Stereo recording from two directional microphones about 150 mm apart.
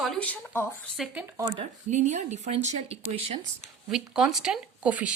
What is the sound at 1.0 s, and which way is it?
Speech, 10° right (ahead or behind).